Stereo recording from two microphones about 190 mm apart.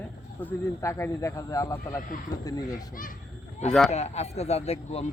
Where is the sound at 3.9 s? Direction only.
35° left (ahead or behind).